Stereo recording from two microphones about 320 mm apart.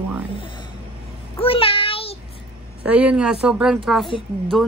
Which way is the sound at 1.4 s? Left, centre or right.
Centre.